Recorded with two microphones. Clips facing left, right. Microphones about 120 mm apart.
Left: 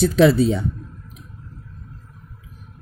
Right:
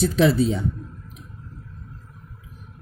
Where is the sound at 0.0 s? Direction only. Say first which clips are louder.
Left 4 dB; 70° left (ahead or behind).